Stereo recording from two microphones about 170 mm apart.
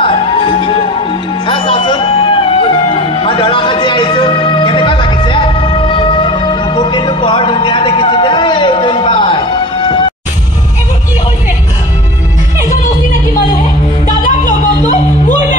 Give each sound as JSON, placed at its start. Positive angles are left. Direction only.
{"t": 0.0, "sound": "music", "side_deg": 30}
{"t": 14.0, "sound": "music", "side_deg": 50}